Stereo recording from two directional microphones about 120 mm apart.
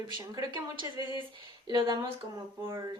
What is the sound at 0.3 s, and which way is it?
Speech, 35° right (ahead or behind).